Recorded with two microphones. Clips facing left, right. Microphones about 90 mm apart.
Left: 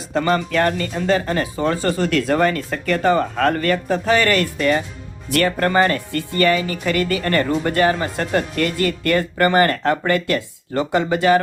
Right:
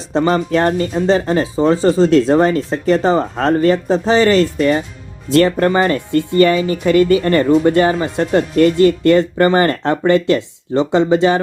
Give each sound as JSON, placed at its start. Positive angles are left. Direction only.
{"t": 0.1, "sound": "speech", "side_deg": -20}